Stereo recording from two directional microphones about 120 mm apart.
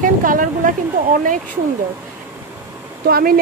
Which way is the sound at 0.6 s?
90° right.